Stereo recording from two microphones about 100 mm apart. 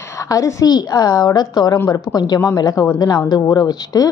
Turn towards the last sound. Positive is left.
turn(degrees=40)  # may be behind; listen again after turning